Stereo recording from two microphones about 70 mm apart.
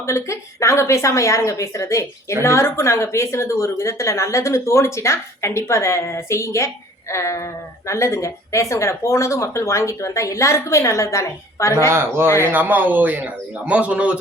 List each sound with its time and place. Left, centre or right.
0.0 s a woman's voice: left
11.9 s a man's voice: right; by 14.2 s centre